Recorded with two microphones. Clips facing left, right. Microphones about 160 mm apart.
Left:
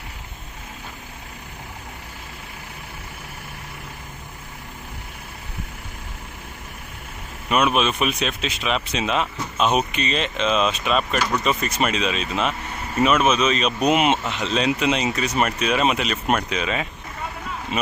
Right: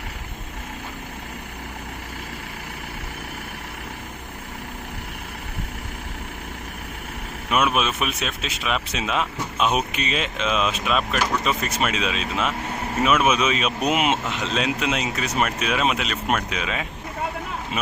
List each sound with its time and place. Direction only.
7.5 s speech: 5° right (ahead or behind)